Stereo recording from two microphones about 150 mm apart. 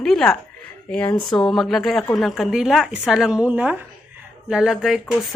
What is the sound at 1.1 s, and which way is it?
Speech, 30° left (ahead or behind).